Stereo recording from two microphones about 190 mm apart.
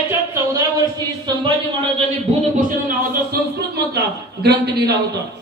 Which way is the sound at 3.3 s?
55° right (ahead or behind).